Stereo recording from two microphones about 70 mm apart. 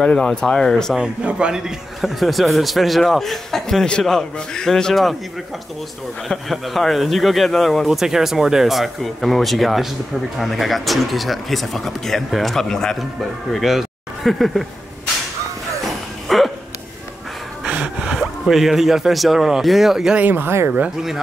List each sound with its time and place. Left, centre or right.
0.0 s speech: centre
1.2 s a man's voice: centre
6.2 s a man's voice: centre
15.8 s music: centre
17.6 s speech: centre
20.2 s speech: right